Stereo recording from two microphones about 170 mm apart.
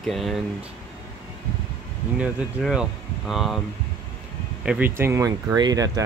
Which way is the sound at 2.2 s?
5° right (ahead or behind).